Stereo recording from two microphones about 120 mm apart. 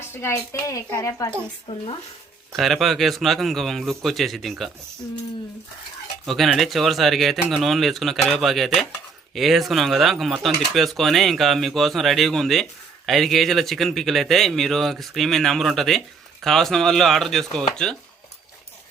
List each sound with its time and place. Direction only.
0.1 s a woman's voice: 20° left (ahead or behind)
1.6 s speech: 50° left (ahead or behind)
2.5 s speech: centre (ahead or behind)
6.2 s speech: centre (ahead or behind)